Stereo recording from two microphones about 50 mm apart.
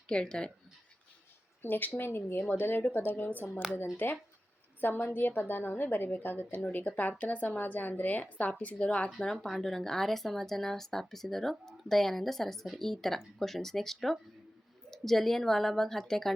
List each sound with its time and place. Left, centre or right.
0.1 s speech: centre
1.6 s a woman's voice: left
2.0 s a woman's voice: left
9.2 s speech: centre